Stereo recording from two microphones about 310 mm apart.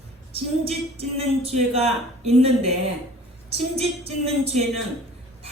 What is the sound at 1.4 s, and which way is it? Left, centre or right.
Speech, centre.